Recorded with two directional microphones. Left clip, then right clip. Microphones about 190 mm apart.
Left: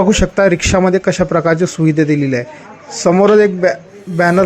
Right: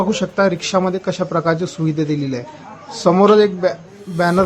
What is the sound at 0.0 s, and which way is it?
A man's voice, 15° left (ahead or behind).